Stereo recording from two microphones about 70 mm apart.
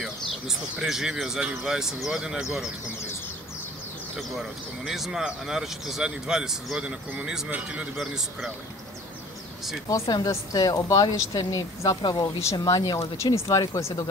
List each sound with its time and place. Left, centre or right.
0.7 s speech: centre
4.2 s speech: centre
8.0 s speech: centre
9.8 s speech: left
13.3 s speech: left